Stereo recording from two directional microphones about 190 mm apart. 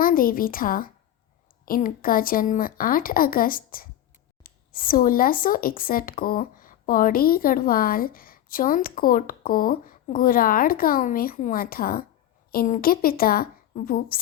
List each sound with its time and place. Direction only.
0.0 s a woman's voice: 50° left (ahead or behind)